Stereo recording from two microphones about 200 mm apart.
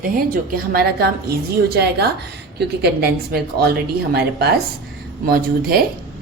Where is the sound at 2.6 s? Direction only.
55° right (ahead or behind).